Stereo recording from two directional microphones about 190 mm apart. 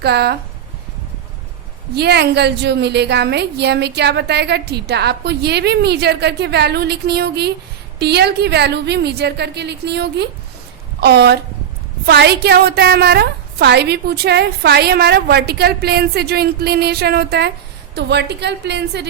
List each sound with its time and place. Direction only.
0.0 s a woman's voice: 60° right (ahead or behind)
2.0 s a woman's voice: 60° right (ahead or behind)